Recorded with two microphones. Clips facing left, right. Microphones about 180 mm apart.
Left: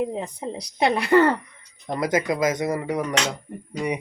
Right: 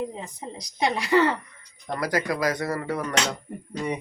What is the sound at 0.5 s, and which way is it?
Speech, 60° left (ahead or behind).